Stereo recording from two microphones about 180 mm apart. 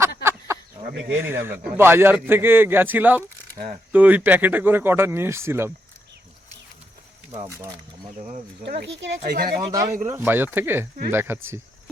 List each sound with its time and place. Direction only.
0.2 s a sound: 15° right (ahead or behind)
1.3 s speech: 15° right (ahead or behind)
3.6 s speech: 45° right (ahead or behind)
3.9 s speech: 10° right (ahead or behind)
8.6 s speech: 70° right (ahead or behind)
9.7 s speech: 15° right (ahead or behind)